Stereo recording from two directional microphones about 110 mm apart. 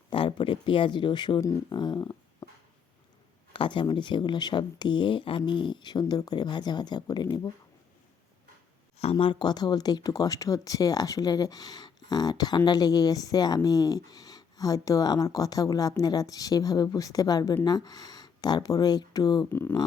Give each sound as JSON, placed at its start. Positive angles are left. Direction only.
{"t": 0.1, "sound": "speech", "side_deg": 50}
{"t": 3.5, "sound": "speech", "side_deg": 50}
{"t": 9.1, "sound": "speech", "side_deg": 50}
{"t": 19.5, "sound": "speech", "side_deg": 20}